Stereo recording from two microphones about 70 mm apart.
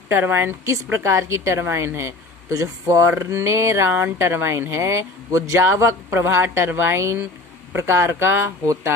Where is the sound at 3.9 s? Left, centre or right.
Right.